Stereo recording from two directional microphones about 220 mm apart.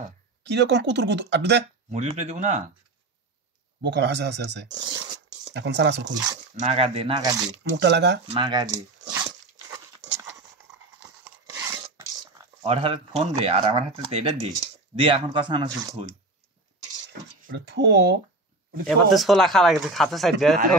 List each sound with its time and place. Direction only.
0.6 s speech: 50° right (ahead or behind)
1.9 s speech: 30° right (ahead or behind)
3.8 s speech: 50° right (ahead or behind)
4.7 s dog: 20° right (ahead or behind)
5.5 s speech: 55° right (ahead or behind)
6.3 s speech: 30° right (ahead or behind)
7.7 s speech: 55° right (ahead or behind)
8.3 s dog: 20° right (ahead or behind)
11.0 s tearing: 15° right (ahead or behind)
12.6 s speech: 25° right (ahead or behind)
17.5 s speech: 50° right (ahead or behind)
18.9 s speech: centre (ahead or behind)